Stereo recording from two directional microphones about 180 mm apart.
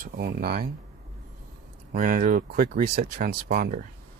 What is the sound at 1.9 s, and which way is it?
Speech, 50° right (ahead or behind).